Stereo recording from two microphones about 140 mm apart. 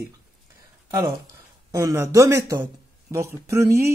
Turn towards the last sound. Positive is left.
turn(degrees=-20)  # may be behind; listen again after turning